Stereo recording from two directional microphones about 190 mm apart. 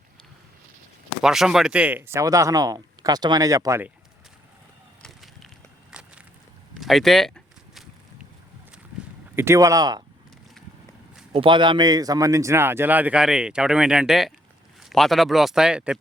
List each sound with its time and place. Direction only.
1.2 s a man's voice: centre (ahead or behind)
5.0 s a sound: centre (ahead or behind)
9.3 s a man's voice: 15° right (ahead or behind)
11.3 s a man's voice: 25° right (ahead or behind); by 16.0 s 5° right (ahead or behind)